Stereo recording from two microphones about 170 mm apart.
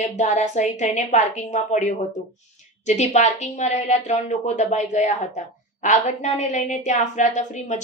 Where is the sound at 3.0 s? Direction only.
40° left (ahead or behind).